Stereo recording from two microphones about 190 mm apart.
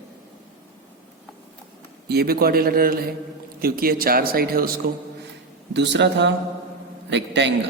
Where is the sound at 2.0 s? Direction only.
55° right (ahead or behind).